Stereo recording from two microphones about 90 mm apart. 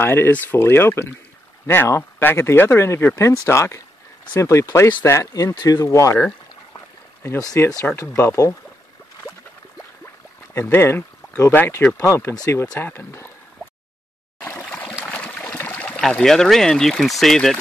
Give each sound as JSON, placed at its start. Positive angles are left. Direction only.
{"t": 0.0, "sound": "speech", "side_deg": 20}
{"t": 7.2, "sound": "speech", "side_deg": 35}
{"t": 10.5, "sound": "speech", "side_deg": 30}
{"t": 14.4, "sound": "a sound", "side_deg": 15}
{"t": 16.1, "sound": "speech", "side_deg": 5}